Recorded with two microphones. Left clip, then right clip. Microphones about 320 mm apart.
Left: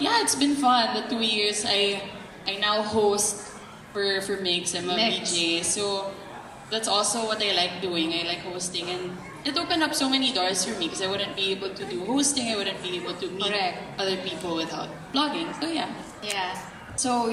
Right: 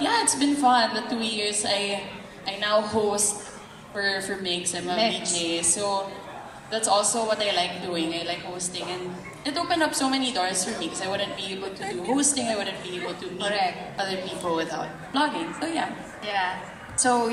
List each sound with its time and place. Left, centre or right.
0.0 s a woman's voice: right